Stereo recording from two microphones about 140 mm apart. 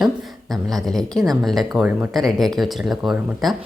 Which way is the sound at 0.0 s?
Centre (ahead or behind).